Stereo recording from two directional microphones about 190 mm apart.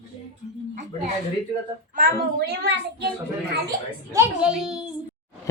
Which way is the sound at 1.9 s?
50° right (ahead or behind).